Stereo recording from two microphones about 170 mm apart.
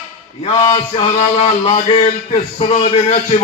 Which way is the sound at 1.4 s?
35° left (ahead or behind).